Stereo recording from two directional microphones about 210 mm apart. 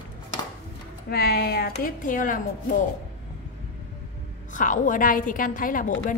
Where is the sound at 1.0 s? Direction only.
50° left (ahead or behind).